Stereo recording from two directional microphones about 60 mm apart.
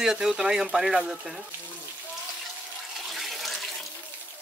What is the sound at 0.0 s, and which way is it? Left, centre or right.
Speech, centre.